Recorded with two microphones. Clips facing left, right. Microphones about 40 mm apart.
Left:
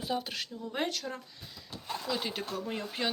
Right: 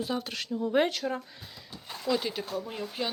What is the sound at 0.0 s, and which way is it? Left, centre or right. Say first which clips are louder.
Speech: right 2 dB; centre.